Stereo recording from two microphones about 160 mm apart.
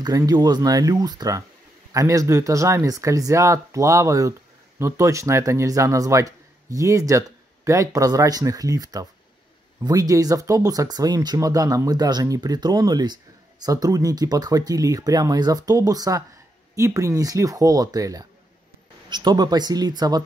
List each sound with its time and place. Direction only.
0.0 s speech: 25° right (ahead or behind)